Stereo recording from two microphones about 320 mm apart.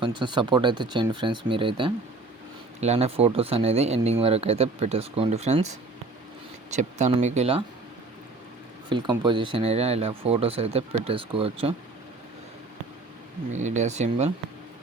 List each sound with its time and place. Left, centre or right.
0.2 s speech: centre
6.7 s speech: right
8.9 s speech: centre
13.6 s speech: right